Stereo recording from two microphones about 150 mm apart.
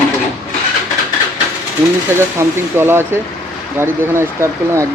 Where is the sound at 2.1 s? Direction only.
15° right (ahead or behind).